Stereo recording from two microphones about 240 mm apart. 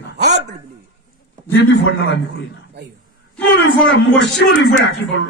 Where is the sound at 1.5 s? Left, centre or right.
Left.